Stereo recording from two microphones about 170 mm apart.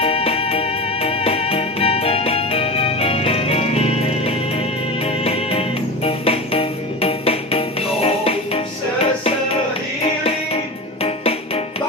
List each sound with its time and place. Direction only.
0.0 s music: 35° left (ahead or behind)
11.0 s music: 35° left (ahead or behind)